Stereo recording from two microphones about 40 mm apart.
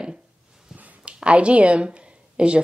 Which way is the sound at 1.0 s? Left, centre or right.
Right.